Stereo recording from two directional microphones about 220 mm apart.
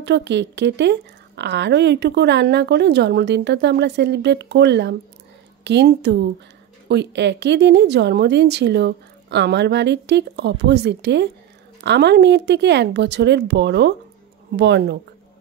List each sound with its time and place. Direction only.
0.0 s speech: 50° right (ahead or behind)